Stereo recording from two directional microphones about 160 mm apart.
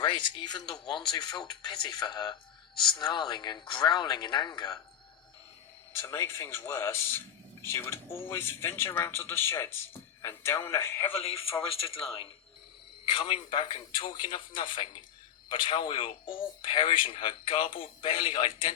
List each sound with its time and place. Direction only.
0.0 s speech: 30° left (ahead or behind)
6.0 s speech: 15° left (ahead or behind)
11.2 s speech: 35° left (ahead or behind)
13.1 s speech: 35° left (ahead or behind)